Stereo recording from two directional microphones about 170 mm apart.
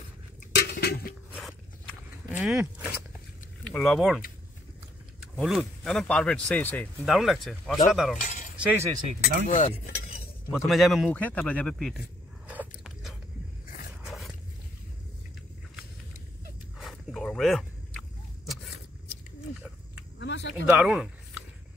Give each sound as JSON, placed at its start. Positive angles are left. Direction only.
{"t": 0.6, "sound": "a sound", "side_deg": 70}
{"t": 1.3, "sound": "a sound", "side_deg": 0}
{"t": 2.4, "sound": "speech", "side_deg": -5}
{"t": 3.6, "sound": "speech", "side_deg": 5}
{"t": 5.4, "sound": "speech", "side_deg": 0}
{"t": 9.2, "sound": "speech", "side_deg": 50}
{"t": 10.5, "sound": "speech", "side_deg": 0}
{"t": 12.4, "sound": "biting", "side_deg": -5}
{"t": 14.0, "sound": "dog", "side_deg": 0}
{"t": 16.7, "sound": "walk", "side_deg": 0}
{"t": 20.2, "sound": "a sound", "side_deg": 90}
{"t": 20.6, "sound": "a sound", "side_deg": -5}